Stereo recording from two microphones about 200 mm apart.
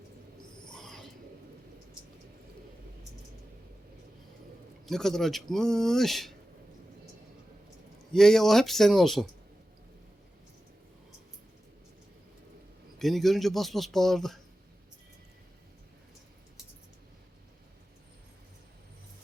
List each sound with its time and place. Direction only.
0.6 s owl: 5° left (ahead or behind)
4.9 s speech: centre (ahead or behind)
8.1 s speech: centre (ahead or behind)
13.0 s speech: centre (ahead or behind)